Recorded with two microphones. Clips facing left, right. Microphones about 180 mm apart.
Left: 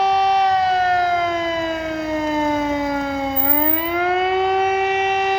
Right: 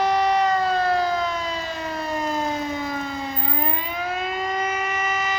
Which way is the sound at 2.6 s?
90° left.